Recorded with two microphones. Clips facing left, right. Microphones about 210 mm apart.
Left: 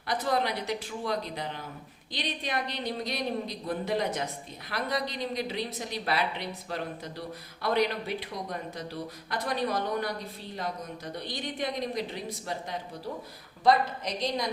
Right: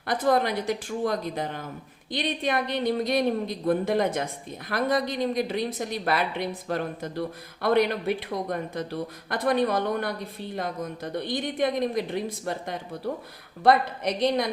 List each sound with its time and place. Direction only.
0.1 s a woman's voice: 50° right (ahead or behind)